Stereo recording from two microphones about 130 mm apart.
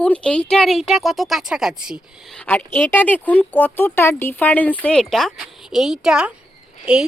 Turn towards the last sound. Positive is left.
turn(degrees=-10)  # may be behind; listen again after turning